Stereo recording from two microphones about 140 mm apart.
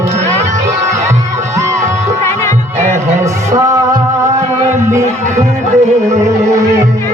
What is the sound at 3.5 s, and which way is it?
Music, 25° right (ahead or behind).